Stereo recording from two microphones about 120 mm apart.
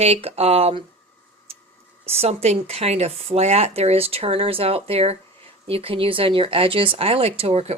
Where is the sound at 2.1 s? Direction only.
60° right (ahead or behind).